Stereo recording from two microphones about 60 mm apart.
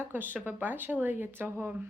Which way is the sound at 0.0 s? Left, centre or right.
Right.